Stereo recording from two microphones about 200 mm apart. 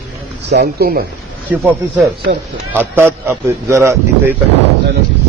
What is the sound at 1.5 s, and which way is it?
Speech, 10° right (ahead or behind).